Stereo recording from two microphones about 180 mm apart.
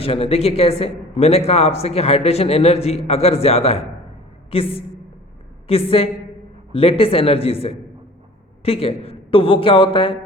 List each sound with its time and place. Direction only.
0.0 s speech: 35° left (ahead or behind)